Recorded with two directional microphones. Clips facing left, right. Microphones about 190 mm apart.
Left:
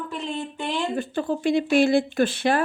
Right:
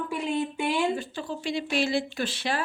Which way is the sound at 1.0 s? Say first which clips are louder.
Left 8 dB; 55° left (ahead or behind).